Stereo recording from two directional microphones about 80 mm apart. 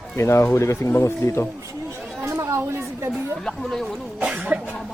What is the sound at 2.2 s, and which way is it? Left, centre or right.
Chatter, right.